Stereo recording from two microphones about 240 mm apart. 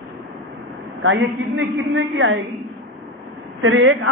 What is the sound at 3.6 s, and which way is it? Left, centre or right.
Speech, right.